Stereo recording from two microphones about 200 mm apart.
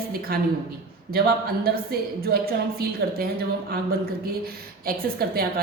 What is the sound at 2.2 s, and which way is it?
Speech, 50° right (ahead or behind).